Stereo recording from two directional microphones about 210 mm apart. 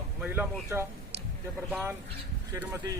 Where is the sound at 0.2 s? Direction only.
10° right (ahead or behind).